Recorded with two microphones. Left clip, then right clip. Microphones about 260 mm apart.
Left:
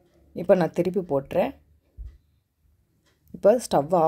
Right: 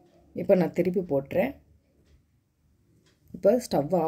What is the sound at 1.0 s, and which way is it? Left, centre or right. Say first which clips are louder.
Speech: left 2 dB; left.